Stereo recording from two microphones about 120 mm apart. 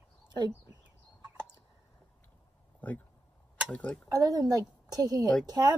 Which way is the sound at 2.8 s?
10° left (ahead or behind).